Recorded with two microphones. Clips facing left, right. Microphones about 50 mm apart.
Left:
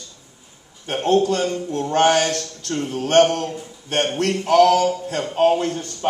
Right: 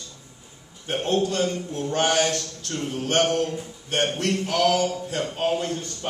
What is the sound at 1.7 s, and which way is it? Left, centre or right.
Speech, left.